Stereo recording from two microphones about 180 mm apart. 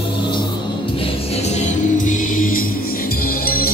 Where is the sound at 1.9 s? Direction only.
45° left (ahead or behind).